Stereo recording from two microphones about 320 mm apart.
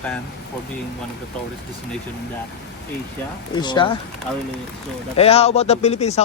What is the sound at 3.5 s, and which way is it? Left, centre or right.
Speech, centre.